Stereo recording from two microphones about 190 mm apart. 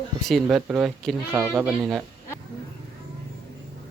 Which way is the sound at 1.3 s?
10° right (ahead or behind).